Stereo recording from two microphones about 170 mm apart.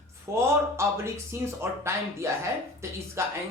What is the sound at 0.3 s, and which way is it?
Speech, 15° right (ahead or behind).